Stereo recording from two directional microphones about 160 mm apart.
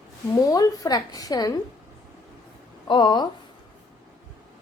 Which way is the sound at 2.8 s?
30° left (ahead or behind).